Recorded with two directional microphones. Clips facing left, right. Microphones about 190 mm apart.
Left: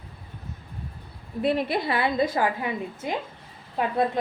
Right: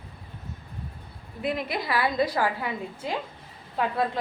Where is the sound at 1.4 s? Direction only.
30° left (ahead or behind).